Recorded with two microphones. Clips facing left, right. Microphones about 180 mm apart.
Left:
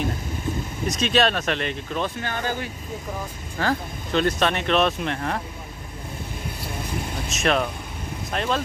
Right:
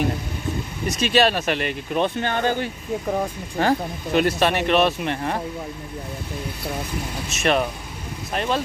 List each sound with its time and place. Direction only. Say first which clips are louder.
0.8 s speech: right 2 dB; 5° right (ahead or behind)
1.9 s speech: right 5 dB; 20° right (ahead or behind)
3.5 s speech: right 4 dB; 15° right (ahead or behind)
7.2 s speech: right 2 dB; centre (ahead or behind)